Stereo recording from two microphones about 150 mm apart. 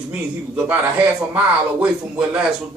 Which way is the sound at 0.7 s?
10° right (ahead or behind).